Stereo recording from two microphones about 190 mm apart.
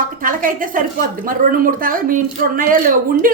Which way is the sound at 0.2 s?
45° right (ahead or behind).